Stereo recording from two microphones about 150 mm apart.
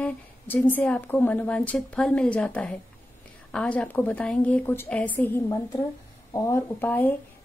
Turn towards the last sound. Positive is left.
turn(degrees=10)  # may be behind; listen again after turning